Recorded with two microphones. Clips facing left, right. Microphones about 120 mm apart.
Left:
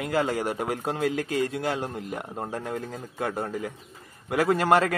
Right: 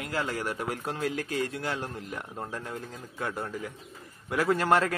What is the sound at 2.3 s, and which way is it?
A man's voice, 35° left (ahead or behind).